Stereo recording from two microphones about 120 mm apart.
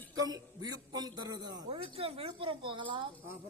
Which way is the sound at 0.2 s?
30° right (ahead or behind).